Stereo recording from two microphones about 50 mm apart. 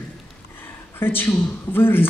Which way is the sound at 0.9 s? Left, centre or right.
Left.